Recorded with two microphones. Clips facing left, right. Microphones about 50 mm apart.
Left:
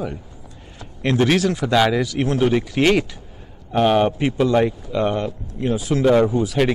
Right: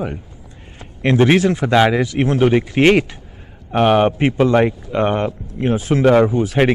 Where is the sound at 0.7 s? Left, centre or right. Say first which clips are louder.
Right 4 dB; right.